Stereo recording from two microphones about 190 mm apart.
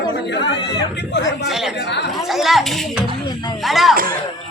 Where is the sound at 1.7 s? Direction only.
60° left (ahead or behind).